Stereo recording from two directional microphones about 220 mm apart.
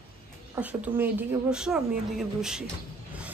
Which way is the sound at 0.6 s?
5° right (ahead or behind).